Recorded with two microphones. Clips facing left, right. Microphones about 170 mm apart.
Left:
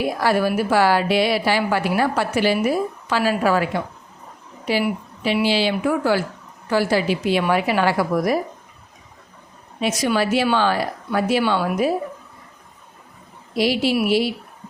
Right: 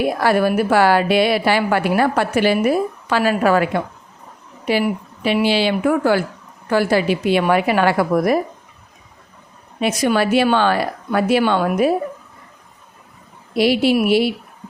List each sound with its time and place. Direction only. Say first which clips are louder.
0.0 s speech: right 3 dB; 60° right (ahead or behind)
9.8 s speech: right 3 dB; 55° right (ahead or behind)
13.5 s speech: right 4 dB; 60° right (ahead or behind)